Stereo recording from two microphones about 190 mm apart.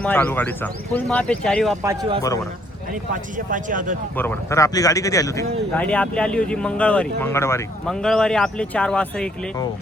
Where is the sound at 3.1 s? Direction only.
45° right (ahead or behind).